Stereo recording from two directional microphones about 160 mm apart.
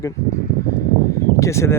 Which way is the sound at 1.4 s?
15° left (ahead or behind).